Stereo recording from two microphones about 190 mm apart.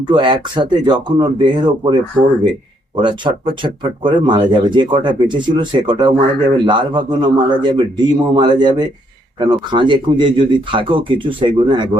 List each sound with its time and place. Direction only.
0.0 s speech: 25° right (ahead or behind)